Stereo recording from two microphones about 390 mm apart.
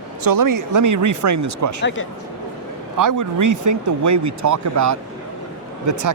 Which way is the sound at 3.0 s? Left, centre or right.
Right.